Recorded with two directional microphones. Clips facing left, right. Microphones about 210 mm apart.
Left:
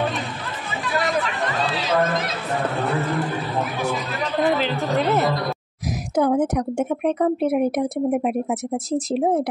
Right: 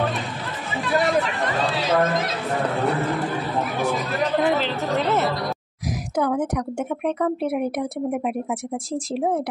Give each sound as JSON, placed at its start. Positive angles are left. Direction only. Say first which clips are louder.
{"t": 4.6, "sound": "a woman's voice", "louder": "left 1 dB", "side_deg": 0}
{"t": 6.1, "sound": "a woman's voice", "louder": "left 4 dB", "side_deg": 25}